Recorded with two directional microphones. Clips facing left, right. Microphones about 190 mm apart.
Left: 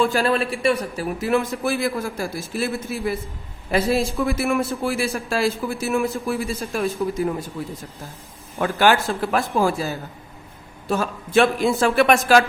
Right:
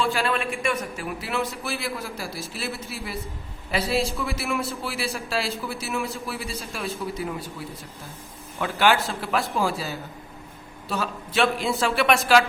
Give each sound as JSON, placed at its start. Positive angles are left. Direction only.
{"t": 0.0, "sound": "a man's voice", "side_deg": 40}
{"t": 8.5, "sound": "a man's voice", "side_deg": 50}